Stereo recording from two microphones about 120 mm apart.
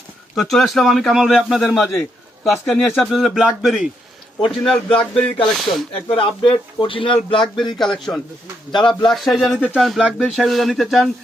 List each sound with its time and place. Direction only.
0.3 s a man's voice: centre (ahead or behind)
4.9 s a man's voice: 5° left (ahead or behind)
6.1 s speech: 45° left (ahead or behind)
7.8 s a man's voice: 5° left (ahead or behind)
8.7 s a man's voice: 40° left (ahead or behind)
9.0 s a man's voice: centre (ahead or behind)